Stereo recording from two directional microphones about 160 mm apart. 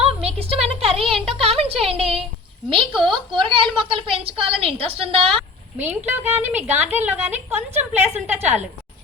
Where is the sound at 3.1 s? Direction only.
30° right (ahead or behind).